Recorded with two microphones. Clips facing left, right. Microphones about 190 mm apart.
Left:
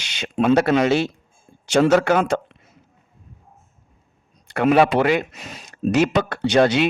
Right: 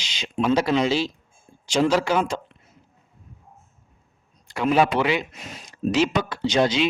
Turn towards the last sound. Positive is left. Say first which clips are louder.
# left 4 dB
turn(degrees=60)  # may be behind; listen again after turning